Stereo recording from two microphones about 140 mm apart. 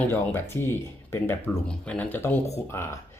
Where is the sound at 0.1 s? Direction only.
15° left (ahead or behind).